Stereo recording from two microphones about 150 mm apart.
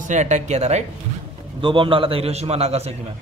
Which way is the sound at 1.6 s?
35° right (ahead or behind).